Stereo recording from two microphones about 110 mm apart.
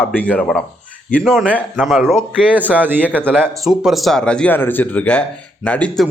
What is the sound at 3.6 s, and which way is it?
Speech, centre (ahead or behind).